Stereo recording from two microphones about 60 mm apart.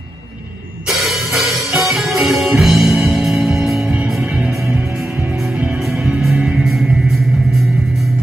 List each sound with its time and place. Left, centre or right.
0.8 s music: centre; by 4.5 s right
6.2 s music: centre